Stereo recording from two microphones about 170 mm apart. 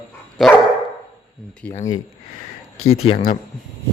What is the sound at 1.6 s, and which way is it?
Speech, 10° left (ahead or behind).